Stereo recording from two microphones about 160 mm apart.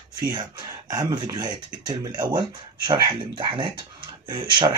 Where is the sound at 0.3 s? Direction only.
25° right (ahead or behind).